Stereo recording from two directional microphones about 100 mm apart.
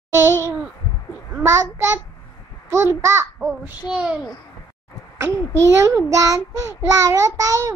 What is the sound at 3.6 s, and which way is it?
Speech, 10° right (ahead or behind).